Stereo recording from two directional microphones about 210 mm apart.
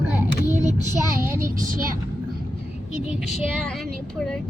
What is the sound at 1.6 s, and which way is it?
Speech, 40° right (ahead or behind).